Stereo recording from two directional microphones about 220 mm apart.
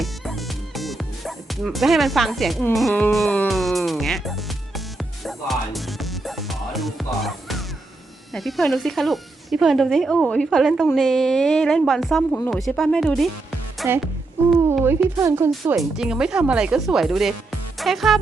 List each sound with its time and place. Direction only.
0.0 s speech: centre (ahead or behind)
5.2 s music: centre (ahead or behind)
8.3 s speech: centre (ahead or behind)
14.7 s speech: 10° right (ahead or behind)
15.8 s speech: 5° right (ahead or behind)